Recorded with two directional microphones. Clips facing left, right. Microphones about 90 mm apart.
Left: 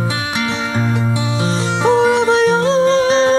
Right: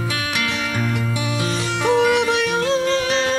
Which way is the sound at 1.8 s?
30° left (ahead or behind).